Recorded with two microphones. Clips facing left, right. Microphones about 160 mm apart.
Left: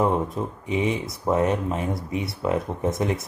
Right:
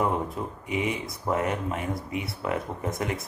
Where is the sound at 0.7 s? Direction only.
25° left (ahead or behind).